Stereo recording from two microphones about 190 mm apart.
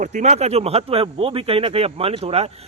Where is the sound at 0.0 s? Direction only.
40° right (ahead or behind).